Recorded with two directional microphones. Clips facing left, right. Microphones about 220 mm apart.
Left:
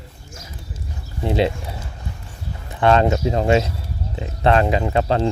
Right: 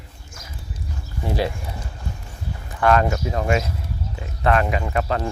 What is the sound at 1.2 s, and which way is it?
Speech, 25° left (ahead or behind).